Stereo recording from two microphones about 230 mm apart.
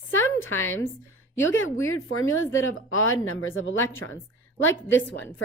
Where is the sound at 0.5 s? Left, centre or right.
Centre.